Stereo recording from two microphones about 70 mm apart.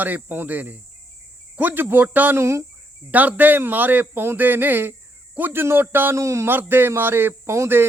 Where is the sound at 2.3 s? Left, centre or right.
Right.